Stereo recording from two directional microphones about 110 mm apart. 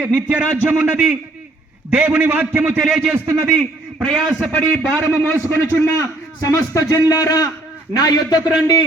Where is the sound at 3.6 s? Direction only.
5° left (ahead or behind).